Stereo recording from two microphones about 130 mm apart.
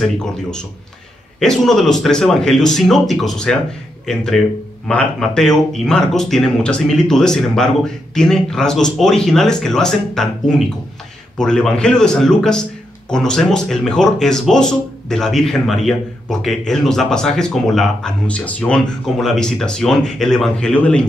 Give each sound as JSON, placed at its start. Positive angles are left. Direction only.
{"t": 0.0, "sound": "speech", "side_deg": 5}